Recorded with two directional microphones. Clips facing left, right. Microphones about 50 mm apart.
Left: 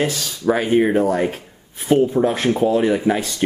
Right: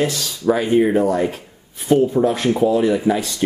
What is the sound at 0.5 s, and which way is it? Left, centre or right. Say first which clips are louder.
Speech: right 1 dB; left.